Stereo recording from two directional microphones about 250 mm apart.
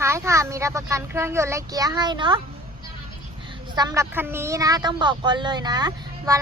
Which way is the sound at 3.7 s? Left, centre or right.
Centre.